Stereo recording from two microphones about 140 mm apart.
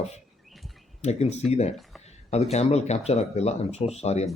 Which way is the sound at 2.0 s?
50° left (ahead or behind).